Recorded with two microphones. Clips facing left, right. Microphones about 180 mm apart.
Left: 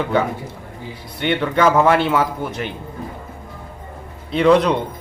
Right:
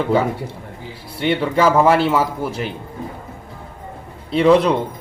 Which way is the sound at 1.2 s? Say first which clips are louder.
Right 1 dB; 5° right (ahead or behind).